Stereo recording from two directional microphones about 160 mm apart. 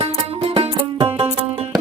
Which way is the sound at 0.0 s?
40° right (ahead or behind).